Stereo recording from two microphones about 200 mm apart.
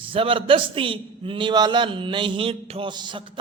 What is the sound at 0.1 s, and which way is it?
A man's voice, 25° right (ahead or behind).